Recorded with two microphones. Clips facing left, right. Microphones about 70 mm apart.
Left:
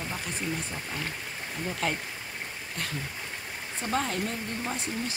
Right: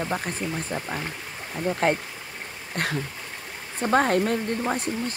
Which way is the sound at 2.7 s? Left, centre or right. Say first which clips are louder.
Right 9 dB; right.